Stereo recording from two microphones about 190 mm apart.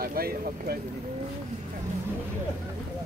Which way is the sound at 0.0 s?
50° right (ahead or behind).